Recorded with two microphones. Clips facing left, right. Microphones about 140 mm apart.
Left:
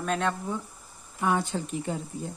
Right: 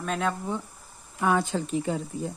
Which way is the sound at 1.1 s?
90° right.